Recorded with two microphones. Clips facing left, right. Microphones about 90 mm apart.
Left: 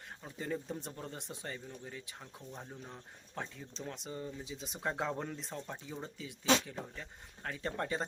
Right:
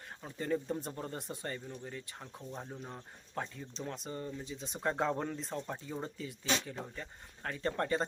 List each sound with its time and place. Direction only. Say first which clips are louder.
0.2 s speech: right 4 dB; 5° left (ahead or behind)
2.2 s speech: right 3 dB; 20° right (ahead or behind)
2.6 s speech: right 3 dB; 10° right (ahead or behind)